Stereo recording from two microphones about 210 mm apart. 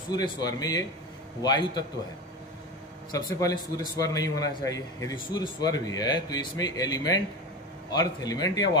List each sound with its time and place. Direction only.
0.1 s speech: 20° left (ahead or behind)
3.1 s a man's voice: 15° left (ahead or behind)